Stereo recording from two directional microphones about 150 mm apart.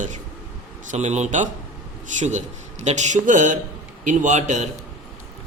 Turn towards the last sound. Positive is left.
turn(degrees=-50)  # may be behind; listen again after turning